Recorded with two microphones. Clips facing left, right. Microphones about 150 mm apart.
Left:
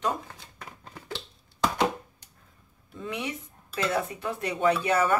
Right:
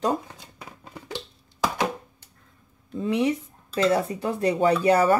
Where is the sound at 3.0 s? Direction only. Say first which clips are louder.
Right 10 dB; 30° right (ahead or behind).